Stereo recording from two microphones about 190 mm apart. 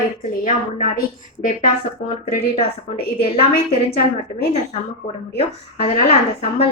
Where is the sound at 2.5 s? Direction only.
30° left (ahead or behind).